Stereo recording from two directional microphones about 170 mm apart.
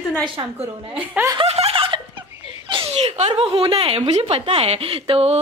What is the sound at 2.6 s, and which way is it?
A woman's voice, 35° right (ahead or behind).